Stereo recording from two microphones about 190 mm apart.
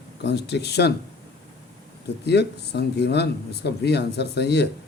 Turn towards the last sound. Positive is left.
turn(degrees=60)  # may be behind; listen again after turning